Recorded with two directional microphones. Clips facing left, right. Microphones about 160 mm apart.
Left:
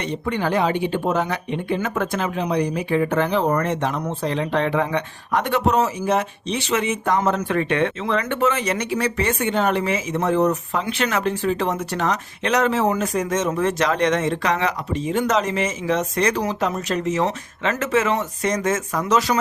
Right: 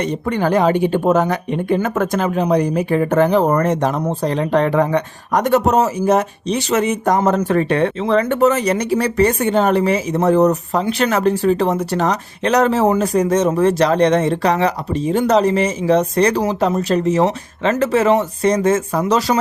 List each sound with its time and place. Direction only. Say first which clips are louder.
0.0 s speech: right 5 dB; 45° right (ahead or behind)